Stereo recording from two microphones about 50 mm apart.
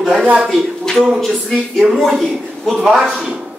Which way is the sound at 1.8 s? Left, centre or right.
Right.